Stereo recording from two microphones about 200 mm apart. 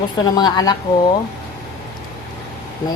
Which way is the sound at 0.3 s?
20° left (ahead or behind).